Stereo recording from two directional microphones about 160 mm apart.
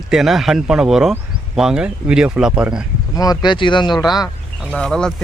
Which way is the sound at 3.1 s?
25° left (ahead or behind).